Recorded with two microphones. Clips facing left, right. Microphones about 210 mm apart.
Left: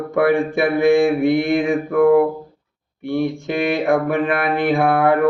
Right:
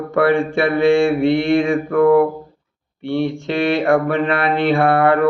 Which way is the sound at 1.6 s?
Centre (ahead or behind).